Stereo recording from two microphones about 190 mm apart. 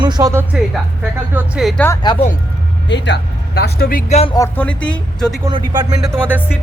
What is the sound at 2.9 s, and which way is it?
Speech, 70° left (ahead or behind).